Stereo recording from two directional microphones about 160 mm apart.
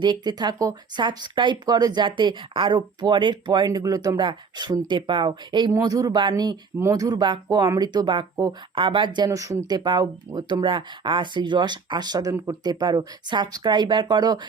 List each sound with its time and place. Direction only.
0.0 s speech: 25° right (ahead or behind)